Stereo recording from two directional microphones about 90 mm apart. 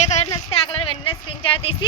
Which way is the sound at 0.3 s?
90° left.